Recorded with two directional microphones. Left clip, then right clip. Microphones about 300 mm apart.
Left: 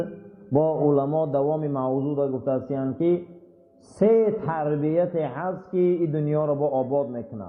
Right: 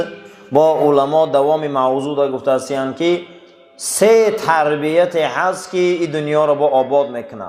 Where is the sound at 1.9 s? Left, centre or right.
Right.